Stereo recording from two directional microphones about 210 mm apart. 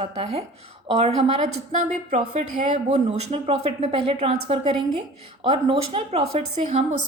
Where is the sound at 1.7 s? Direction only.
35° right (ahead or behind).